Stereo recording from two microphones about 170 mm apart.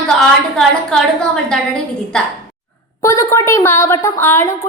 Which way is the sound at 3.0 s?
15° left (ahead or behind).